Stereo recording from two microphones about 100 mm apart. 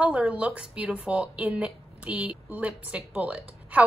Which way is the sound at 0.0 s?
15° right (ahead or behind).